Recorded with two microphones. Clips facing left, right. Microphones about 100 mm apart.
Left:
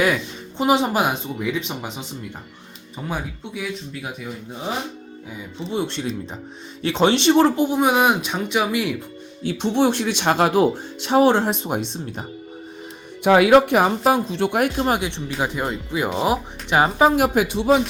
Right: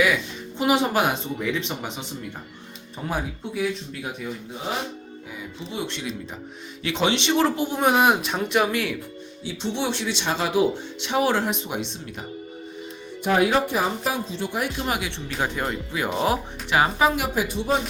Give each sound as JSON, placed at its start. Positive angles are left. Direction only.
{"t": 0.6, "sound": "speech", "side_deg": 20}
{"t": 2.9, "sound": "speech", "side_deg": 0}
{"t": 5.7, "sound": "speech", "side_deg": 35}
{"t": 7.7, "sound": "speech", "side_deg": 5}
{"t": 8.7, "sound": "speech", "side_deg": 15}
{"t": 9.4, "sound": "speech", "side_deg": 55}
{"t": 13.2, "sound": "speech", "side_deg": 85}
{"t": 14.8, "sound": "speech", "side_deg": 35}
{"t": 15.1, "sound": "speech", "side_deg": 15}
{"t": 17.2, "sound": "speech", "side_deg": 60}